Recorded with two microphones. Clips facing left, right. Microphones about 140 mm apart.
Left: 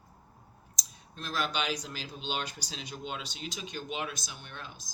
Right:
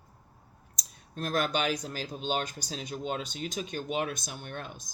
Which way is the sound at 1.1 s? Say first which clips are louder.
Right 4 dB; 50° right (ahead or behind).